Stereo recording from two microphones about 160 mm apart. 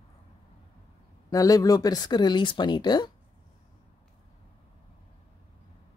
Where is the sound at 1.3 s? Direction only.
20° left (ahead or behind).